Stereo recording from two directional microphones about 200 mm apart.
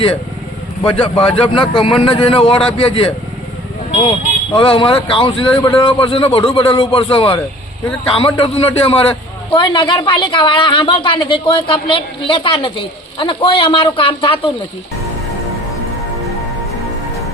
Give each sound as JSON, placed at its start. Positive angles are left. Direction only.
{"t": 0.8, "sound": "a man's voice", "side_deg": 25}
{"t": 4.5, "sound": "a man's voice", "side_deg": 25}